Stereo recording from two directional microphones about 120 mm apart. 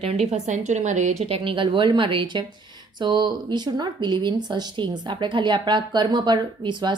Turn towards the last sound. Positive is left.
turn(degrees=-40)  # may be behind; listen again after turning